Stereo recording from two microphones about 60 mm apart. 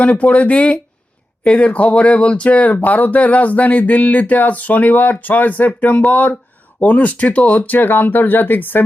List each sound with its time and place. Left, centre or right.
0.0 s speech: left